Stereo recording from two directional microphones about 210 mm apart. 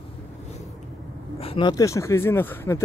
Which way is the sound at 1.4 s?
20° left (ahead or behind).